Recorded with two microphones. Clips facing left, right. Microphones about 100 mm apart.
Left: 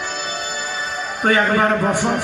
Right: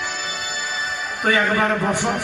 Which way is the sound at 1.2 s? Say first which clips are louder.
Left 3 dB; 40° left (ahead or behind).